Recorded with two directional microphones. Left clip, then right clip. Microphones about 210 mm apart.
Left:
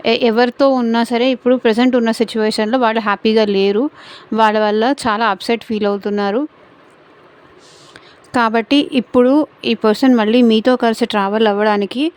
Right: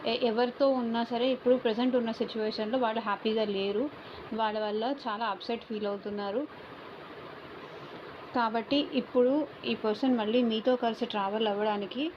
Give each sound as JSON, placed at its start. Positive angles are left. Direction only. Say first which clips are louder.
{"t": 0.0, "sound": "speech", "louder": "left 15 dB", "side_deg": 65}
{"t": 8.3, "sound": "speech", "louder": "left 15 dB", "side_deg": 65}